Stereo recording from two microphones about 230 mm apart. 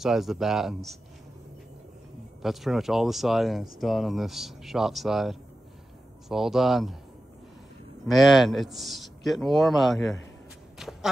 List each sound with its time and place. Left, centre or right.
0.0 s speech: centre
2.4 s speech: centre
8.1 s speech: centre
10.8 s a sound: centre